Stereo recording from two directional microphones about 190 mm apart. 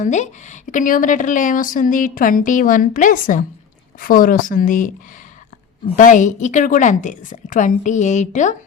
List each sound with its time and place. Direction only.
0.0 s a woman's voice: 40° left (ahead or behind)
6.0 s a woman's voice: 40° left (ahead or behind)